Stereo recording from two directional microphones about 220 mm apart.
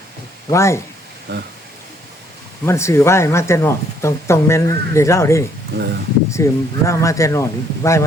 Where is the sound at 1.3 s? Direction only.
50° right (ahead or behind).